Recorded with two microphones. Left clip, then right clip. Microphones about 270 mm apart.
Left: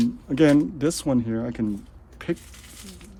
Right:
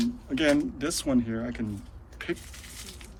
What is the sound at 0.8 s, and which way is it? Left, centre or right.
Speech, left.